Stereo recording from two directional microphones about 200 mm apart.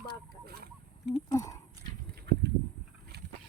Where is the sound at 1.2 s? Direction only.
15° left (ahead or behind).